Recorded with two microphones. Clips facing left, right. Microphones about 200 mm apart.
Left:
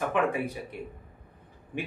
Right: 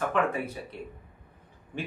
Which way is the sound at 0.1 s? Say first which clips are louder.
Left 1 dB; 15° left (ahead or behind).